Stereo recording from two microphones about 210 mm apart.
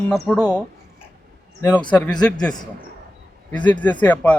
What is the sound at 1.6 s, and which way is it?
Speech, 20° left (ahead or behind).